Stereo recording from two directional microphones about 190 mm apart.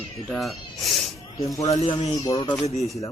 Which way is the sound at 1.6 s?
35° left (ahead or behind).